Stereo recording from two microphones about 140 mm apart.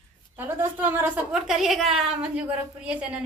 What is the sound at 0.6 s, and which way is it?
A woman's voice, 15° right (ahead or behind).